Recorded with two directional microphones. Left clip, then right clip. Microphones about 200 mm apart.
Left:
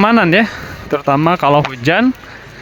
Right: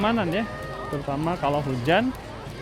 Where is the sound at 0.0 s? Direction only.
30° left (ahead or behind).